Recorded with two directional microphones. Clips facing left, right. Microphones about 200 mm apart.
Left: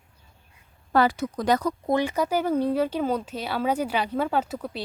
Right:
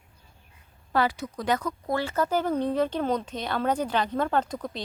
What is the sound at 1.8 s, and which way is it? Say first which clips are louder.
Speech: left 3 dB; 15° left (ahead or behind).